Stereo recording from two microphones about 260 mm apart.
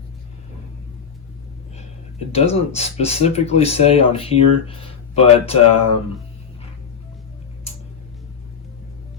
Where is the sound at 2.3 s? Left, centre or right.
Left.